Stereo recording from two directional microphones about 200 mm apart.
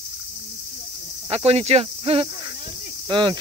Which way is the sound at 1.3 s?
30° right (ahead or behind).